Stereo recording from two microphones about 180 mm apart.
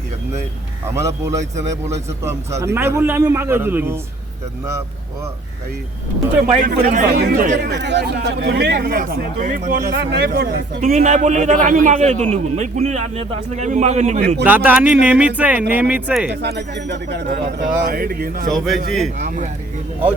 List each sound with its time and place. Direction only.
0.9 s speech: 15° right (ahead or behind)
6.7 s a man's voice: 45° right (ahead or behind)
7.1 s speech: 60° right (ahead or behind)
10.0 s speech: 65° right (ahead or behind)
10.8 s a man's voice: 40° right (ahead or behind)
14.4 s speech: 10° right (ahead or behind)
16.4 s speech: 70° right (ahead or behind)
18.5 s a man's voice: centre (ahead or behind)